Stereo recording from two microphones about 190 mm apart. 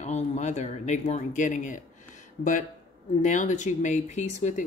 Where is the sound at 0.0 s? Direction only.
40° left (ahead or behind).